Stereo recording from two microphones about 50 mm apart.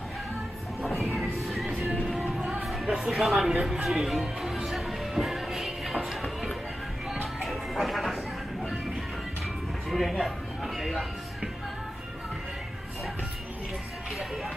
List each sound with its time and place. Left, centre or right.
0.8 s music: centre
2.0 s music: right
2.6 s speech: centre
4.6 s music: centre
7.4 s music: centre
9.8 s music: centre